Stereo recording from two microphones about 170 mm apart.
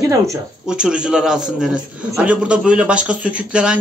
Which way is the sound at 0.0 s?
20° right (ahead or behind).